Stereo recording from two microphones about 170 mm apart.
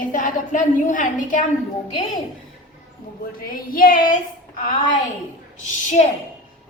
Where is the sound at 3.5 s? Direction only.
55° left (ahead or behind).